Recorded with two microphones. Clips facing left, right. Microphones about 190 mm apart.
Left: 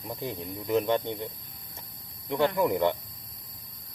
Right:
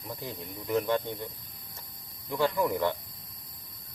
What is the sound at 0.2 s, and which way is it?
Speech, 20° left (ahead or behind).